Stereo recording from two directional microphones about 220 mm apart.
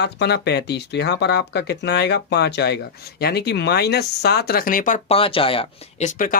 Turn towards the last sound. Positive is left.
turn(degrees=35)  # may be behind; listen again after turning